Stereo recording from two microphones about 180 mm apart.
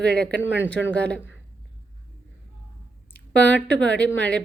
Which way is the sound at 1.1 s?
10° left (ahead or behind).